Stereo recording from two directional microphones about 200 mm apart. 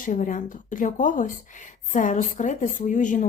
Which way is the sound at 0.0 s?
40° left (ahead or behind).